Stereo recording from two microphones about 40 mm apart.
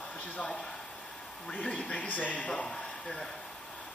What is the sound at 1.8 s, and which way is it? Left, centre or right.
Speech, left.